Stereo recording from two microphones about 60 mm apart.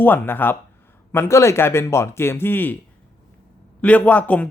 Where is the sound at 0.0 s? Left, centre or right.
Left.